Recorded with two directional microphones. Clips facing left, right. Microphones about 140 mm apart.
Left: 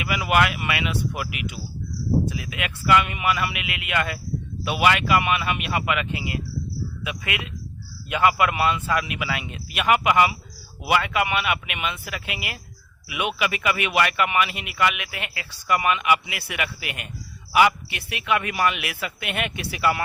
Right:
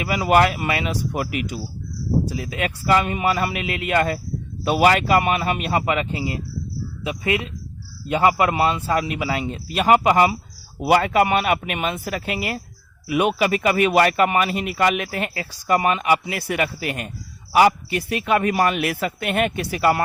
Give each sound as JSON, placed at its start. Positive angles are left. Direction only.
{"t": 0.0, "sound": "speech", "side_deg": -35}